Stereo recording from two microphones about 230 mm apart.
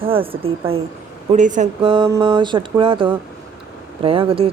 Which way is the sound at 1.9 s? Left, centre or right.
Centre.